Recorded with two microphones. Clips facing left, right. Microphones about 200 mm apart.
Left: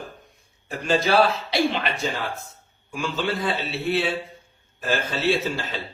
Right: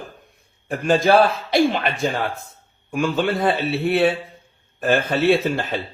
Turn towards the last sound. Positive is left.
turn(degrees=-55)  # may be behind; listen again after turning